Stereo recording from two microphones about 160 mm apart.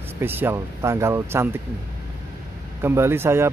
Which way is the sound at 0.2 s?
15° right (ahead or behind).